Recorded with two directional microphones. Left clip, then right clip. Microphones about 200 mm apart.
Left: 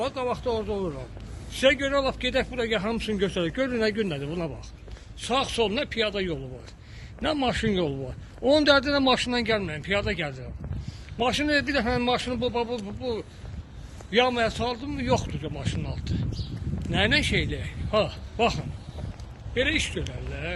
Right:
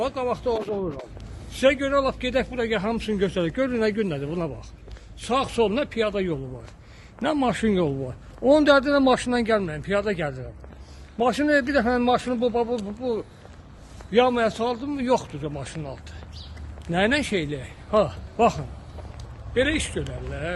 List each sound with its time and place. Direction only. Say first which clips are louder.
0.0 s a man's voice: right 3 dB; 55° right (ahead or behind); by 20.5 s 35° right (ahead or behind)